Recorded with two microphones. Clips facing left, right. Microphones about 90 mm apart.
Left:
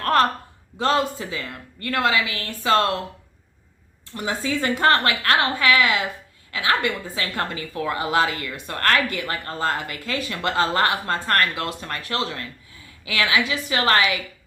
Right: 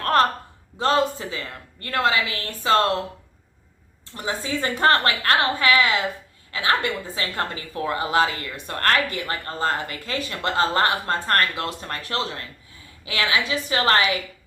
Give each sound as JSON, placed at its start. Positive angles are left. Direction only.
{"t": 0.0, "sound": "a sound", "side_deg": -30}
{"t": 0.8, "sound": "a woman's voice", "side_deg": -30}
{"t": 4.1, "sound": "a woman's voice", "side_deg": -30}